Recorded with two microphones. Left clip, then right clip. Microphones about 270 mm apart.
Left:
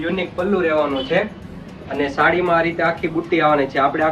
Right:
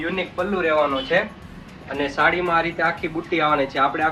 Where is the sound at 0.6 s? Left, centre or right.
Centre.